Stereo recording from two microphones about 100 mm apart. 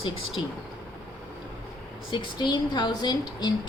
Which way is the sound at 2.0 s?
45° left (ahead or behind).